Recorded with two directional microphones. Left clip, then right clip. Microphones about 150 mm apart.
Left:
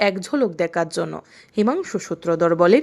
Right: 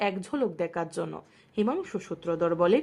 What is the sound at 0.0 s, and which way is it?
Speech, 25° left (ahead or behind).